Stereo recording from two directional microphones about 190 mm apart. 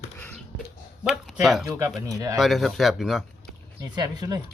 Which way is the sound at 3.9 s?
20° right (ahead or behind).